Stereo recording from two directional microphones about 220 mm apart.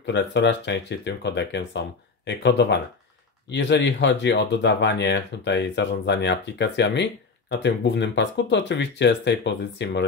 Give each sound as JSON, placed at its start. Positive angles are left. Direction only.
{"t": 0.0, "sound": "speech", "side_deg": 50}